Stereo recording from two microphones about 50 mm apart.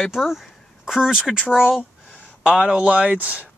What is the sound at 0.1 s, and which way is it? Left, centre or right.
Speech, centre.